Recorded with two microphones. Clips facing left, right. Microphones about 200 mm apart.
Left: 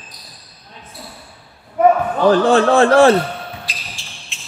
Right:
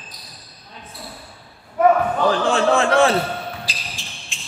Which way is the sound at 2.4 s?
35° left (ahead or behind).